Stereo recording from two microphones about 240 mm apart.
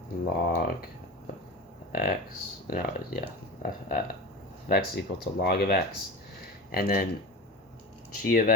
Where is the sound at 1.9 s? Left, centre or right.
Left.